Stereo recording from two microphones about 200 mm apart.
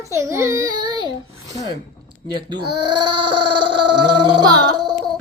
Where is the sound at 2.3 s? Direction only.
20° right (ahead or behind).